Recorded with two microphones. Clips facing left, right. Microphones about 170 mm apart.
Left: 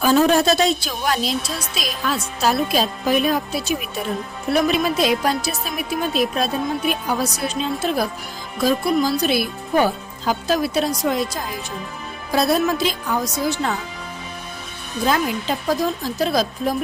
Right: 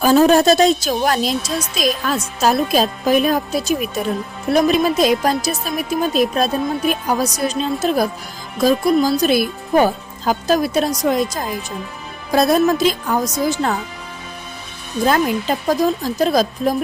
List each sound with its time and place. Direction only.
0.0 s a woman's voice: 40° right (ahead or behind)
15.0 s speech: 45° right (ahead or behind)